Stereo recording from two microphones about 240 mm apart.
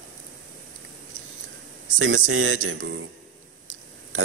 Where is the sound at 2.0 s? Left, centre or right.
Right.